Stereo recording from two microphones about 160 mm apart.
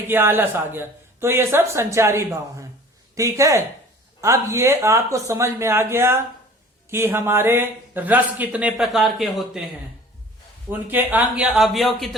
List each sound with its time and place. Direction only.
0.1 s a man's voice: 15° right (ahead or behind)
10.7 s speech: 10° right (ahead or behind)